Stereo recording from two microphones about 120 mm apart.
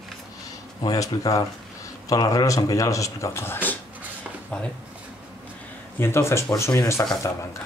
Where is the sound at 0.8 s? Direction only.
30° left (ahead or behind).